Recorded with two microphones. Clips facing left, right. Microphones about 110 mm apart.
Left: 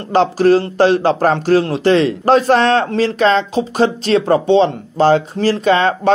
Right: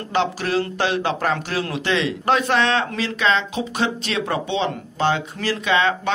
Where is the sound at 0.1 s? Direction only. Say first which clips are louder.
Left 10 dB; 40° left (ahead or behind).